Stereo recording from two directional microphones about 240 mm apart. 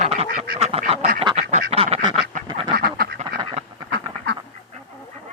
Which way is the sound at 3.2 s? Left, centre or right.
Right.